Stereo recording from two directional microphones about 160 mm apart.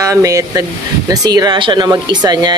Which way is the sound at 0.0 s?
20° right (ahead or behind).